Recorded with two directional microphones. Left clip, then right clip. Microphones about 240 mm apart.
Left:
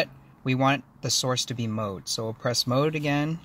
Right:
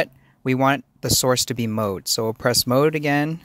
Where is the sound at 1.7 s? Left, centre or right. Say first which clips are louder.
Right 8 dB; right.